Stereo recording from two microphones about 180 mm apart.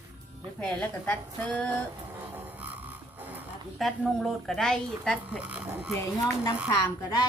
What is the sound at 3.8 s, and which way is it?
A woman's voice, centre (ahead or behind).